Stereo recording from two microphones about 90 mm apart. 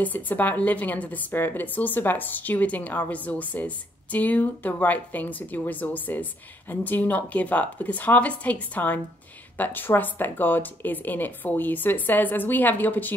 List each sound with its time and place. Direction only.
0.0 s a woman's voice: 20° left (ahead or behind)